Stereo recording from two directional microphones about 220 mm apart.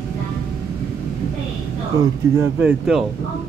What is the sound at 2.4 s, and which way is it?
Speech, 5° right (ahead or behind).